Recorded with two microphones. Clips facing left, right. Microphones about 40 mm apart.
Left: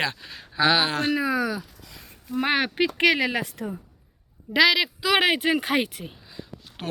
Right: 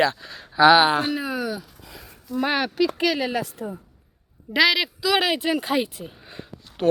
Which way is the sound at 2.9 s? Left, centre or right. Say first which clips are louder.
Left 2 dB; left.